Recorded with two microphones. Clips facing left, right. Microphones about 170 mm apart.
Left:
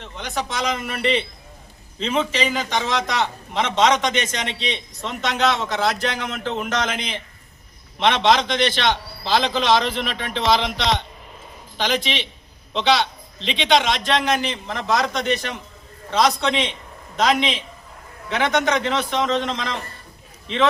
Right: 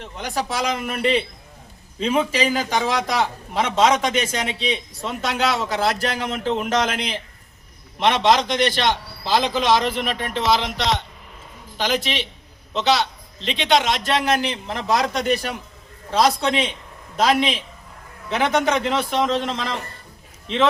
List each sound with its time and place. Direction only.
0.2 s a man's voice: 10° right (ahead or behind)
6.1 s speech: 35° right (ahead or behind)
6.6 s a man's voice: 5° right (ahead or behind)
14.8 s speech: 30° right (ahead or behind)
15.0 s a man's voice: 10° right (ahead or behind)